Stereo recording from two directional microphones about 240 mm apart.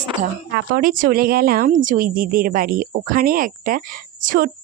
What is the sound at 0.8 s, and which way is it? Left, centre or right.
A woman's voice, right.